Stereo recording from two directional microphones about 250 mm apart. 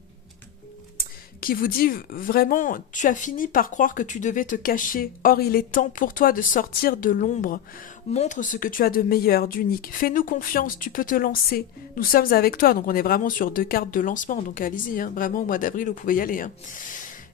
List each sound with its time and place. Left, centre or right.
0.9 s speech: left